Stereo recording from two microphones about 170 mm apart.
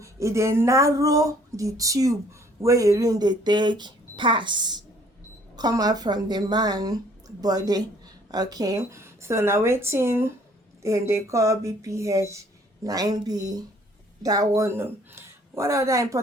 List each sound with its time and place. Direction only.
0.0 s a woman's voice: 15° right (ahead or behind)